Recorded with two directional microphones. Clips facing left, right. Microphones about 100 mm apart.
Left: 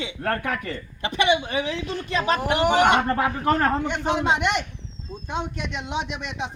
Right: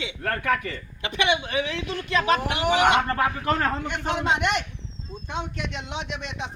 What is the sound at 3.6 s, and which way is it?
Speech, 25° left (ahead or behind).